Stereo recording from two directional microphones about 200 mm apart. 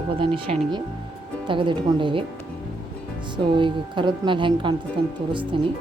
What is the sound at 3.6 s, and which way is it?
Speech, 25° right (ahead or behind).